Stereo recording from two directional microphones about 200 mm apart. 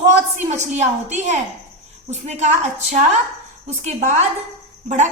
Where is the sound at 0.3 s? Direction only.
35° right (ahead or behind).